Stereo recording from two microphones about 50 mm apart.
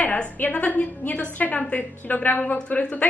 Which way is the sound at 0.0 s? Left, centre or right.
Left.